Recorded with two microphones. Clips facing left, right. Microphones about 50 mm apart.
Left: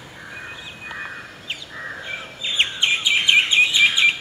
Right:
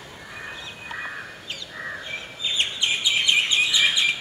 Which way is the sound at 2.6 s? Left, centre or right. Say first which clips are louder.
Left 5 dB; left.